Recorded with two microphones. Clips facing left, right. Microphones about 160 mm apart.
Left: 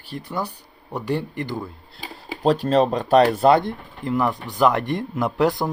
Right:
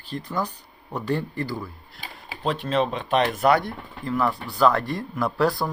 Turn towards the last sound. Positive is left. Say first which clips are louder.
# left 2 dB
turn(degrees=20)  # may be behind; listen again after turning